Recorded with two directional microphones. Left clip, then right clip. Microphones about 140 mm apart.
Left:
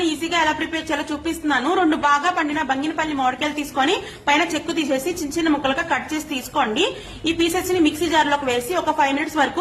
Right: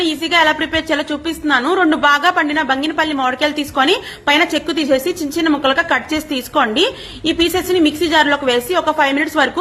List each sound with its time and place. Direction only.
0.0 s a woman's voice: 25° right (ahead or behind)